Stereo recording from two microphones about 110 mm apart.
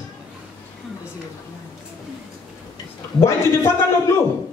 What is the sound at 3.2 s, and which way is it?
Speech, 25° left (ahead or behind).